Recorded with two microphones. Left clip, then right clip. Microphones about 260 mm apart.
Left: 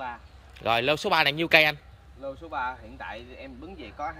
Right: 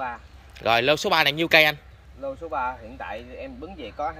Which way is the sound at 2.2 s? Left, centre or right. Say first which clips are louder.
Right 4 dB; right.